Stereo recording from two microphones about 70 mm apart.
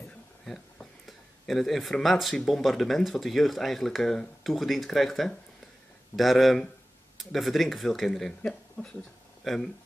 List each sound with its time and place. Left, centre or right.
0.5 s speech: centre